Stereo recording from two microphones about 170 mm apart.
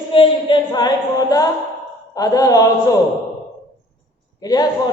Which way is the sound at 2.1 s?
20° left (ahead or behind).